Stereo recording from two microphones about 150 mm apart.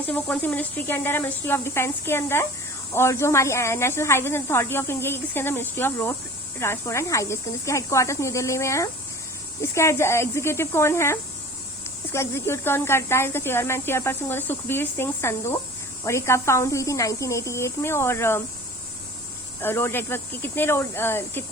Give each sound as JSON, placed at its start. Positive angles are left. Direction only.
{"t": 0.0, "sound": "speech", "side_deg": 10}
{"t": 19.6, "sound": "speech", "side_deg": 15}